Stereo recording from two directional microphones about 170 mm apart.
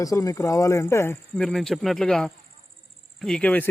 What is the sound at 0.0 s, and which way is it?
Speech, 20° left (ahead or behind).